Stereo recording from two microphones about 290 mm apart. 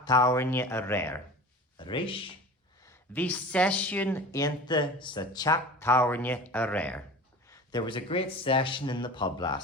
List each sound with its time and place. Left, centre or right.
0.0 s speech: centre
2.8 s speech: centre